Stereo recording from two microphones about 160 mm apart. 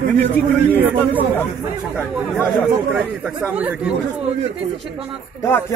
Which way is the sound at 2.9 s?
10° right (ahead or behind).